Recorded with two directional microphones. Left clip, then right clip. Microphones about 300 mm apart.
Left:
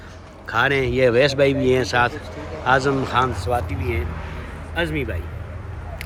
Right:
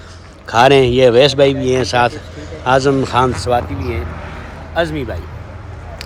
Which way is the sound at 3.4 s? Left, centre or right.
Right.